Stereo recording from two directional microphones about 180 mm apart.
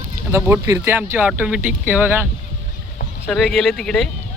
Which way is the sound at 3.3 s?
Centre (ahead or behind).